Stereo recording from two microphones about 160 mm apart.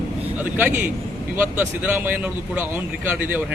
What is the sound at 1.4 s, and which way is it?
Speech, 10° right (ahead or behind).